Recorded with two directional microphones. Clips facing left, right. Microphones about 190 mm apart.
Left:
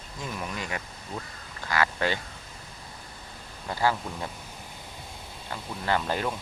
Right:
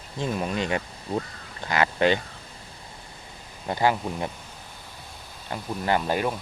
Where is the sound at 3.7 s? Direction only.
20° right (ahead or behind).